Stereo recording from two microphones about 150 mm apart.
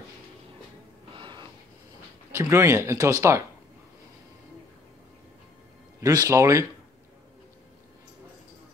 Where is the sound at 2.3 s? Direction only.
15° right (ahead or behind).